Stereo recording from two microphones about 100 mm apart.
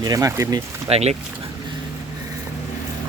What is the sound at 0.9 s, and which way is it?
Speech, 90° right.